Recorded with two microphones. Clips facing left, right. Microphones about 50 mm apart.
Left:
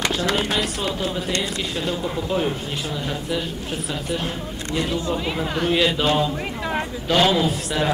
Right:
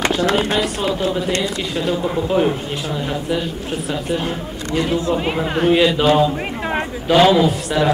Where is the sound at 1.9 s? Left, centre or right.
Centre.